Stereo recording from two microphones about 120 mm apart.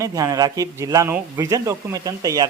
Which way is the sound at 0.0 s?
25° right (ahead or behind).